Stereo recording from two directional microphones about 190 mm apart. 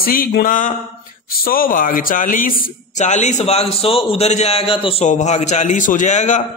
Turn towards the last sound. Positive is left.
turn(degrees=40)  # may be behind; listen again after turning